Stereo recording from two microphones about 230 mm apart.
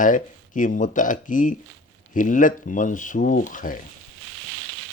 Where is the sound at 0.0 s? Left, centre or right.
Left.